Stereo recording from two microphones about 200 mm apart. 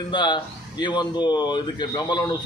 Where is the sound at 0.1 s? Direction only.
20° left (ahead or behind).